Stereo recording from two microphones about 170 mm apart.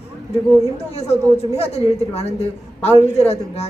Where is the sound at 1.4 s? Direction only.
40° left (ahead or behind).